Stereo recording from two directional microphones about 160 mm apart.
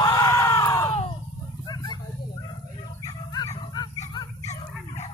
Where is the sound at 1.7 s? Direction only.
25° left (ahead or behind).